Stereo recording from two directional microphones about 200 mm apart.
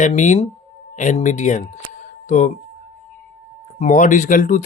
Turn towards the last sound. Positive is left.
turn(degrees=40)  # may be behind; listen again after turning